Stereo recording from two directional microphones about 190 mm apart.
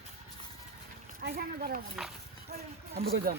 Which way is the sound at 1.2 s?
50° right (ahead or behind).